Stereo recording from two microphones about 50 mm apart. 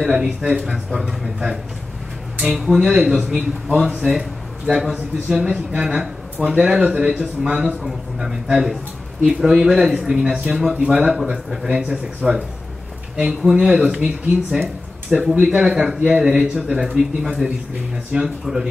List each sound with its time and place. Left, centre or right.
0.0 s a man's voice: centre
0.8 s a man's voice: centre